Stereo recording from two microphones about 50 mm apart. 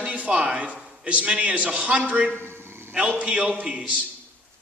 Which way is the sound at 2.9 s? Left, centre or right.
Right.